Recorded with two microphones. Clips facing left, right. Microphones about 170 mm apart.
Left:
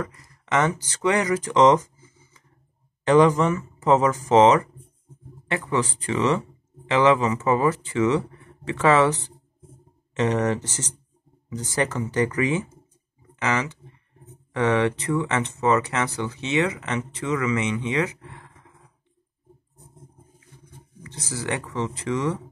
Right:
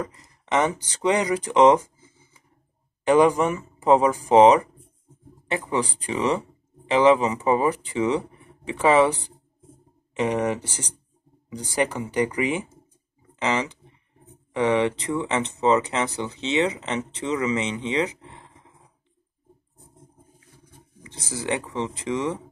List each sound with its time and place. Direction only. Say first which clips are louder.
0.0 s speech: even; 20° right (ahead or behind)
21.0 s speech: even; 15° right (ahead or behind)